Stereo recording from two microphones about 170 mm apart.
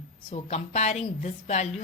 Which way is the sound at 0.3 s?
40° left (ahead or behind).